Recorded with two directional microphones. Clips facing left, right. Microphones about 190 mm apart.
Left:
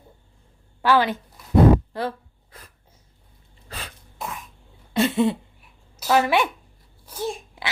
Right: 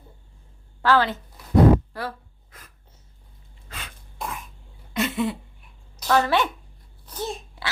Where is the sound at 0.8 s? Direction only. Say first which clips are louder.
Left 1 dB; 15° left (ahead or behind).